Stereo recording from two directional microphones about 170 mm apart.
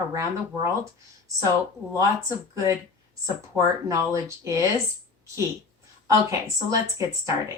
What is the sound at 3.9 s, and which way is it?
Speech, 20° right (ahead or behind).